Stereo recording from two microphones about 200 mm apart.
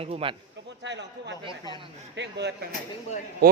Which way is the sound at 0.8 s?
60° right (ahead or behind).